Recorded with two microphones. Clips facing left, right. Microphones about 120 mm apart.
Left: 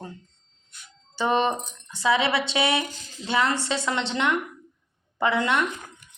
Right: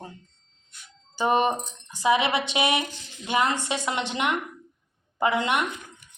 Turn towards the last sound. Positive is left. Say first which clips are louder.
# left 1 dB
turn(degrees=-15)  # may be behind; listen again after turning